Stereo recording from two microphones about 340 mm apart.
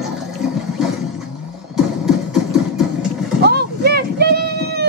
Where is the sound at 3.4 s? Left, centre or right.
Right.